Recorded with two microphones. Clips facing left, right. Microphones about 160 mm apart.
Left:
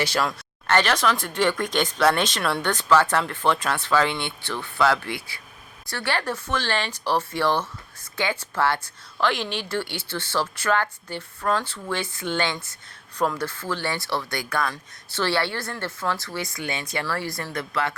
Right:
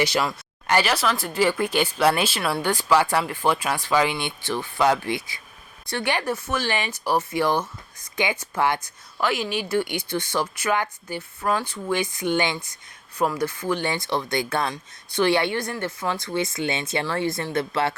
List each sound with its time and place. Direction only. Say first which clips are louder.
0.0 s speech: right 2 dB; 10° right (ahead or behind); by 17.9 s 30° right (ahead or behind)